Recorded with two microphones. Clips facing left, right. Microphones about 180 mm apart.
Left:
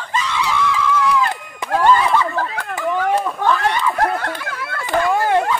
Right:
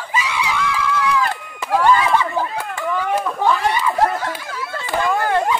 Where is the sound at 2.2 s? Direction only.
10° right (ahead or behind).